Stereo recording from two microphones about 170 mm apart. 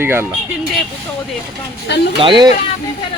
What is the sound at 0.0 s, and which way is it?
Speech, 15° right (ahead or behind).